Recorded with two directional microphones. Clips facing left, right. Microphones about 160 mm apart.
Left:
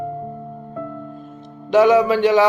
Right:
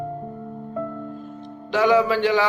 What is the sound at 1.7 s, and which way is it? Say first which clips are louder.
Speech: left 5 dB; 20° left (ahead or behind).